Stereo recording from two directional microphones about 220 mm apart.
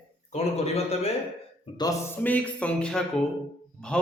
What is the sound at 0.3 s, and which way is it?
Speech, 30° left (ahead or behind).